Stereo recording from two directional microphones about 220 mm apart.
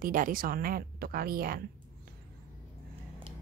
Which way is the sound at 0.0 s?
40° right (ahead or behind).